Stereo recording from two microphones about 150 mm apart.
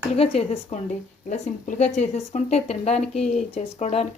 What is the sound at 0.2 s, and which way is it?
A woman's voice, 40° left (ahead or behind).